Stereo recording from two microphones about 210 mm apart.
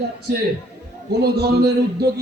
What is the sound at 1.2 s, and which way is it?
Speech, 50° right (ahead or behind).